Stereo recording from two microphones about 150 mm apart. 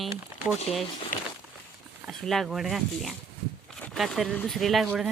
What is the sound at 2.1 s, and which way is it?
Speech, centre (ahead or behind).